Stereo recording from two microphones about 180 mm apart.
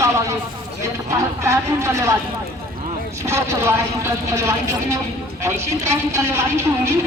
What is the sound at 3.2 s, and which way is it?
Speech, 15° right (ahead or behind).